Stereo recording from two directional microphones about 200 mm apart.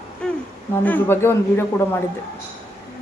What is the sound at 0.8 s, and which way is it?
A man's voice, 10° left (ahead or behind).